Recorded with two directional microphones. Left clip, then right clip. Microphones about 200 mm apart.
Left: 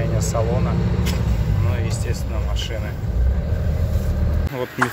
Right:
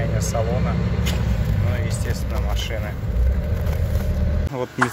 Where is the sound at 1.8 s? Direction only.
Centre (ahead or behind).